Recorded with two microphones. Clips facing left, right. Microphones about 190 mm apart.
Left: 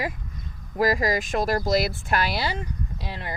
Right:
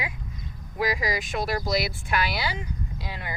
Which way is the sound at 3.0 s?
30° left (ahead or behind).